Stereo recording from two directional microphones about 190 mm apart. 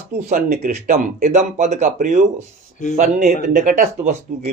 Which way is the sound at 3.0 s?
50° right (ahead or behind).